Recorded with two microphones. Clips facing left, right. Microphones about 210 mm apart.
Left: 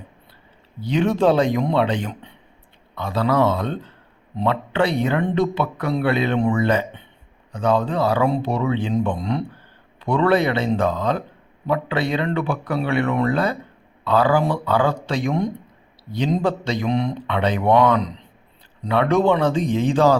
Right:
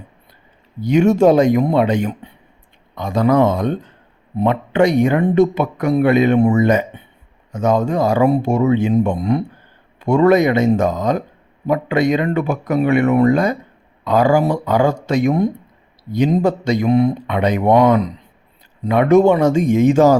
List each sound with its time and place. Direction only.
0.8 s speech: 10° right (ahead or behind)
8.4 s speech: 45° right (ahead or behind)
8.7 s speech: 10° right (ahead or behind)